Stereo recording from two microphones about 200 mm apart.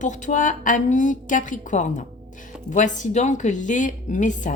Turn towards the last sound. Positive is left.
turn(degrees=40)  # may be behind; listen again after turning